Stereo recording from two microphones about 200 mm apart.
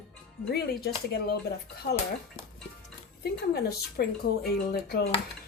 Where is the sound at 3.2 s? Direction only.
50° left (ahead or behind).